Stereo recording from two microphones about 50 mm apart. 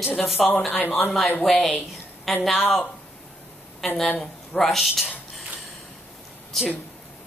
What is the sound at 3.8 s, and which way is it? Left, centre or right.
Speech, centre.